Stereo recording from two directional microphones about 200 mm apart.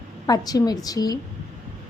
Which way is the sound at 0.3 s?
20° left (ahead or behind).